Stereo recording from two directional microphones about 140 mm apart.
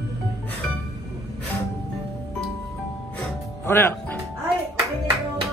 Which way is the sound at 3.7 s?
15° left (ahead or behind).